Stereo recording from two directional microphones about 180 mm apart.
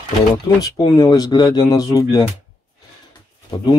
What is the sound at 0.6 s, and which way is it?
Speech, 25° left (ahead or behind).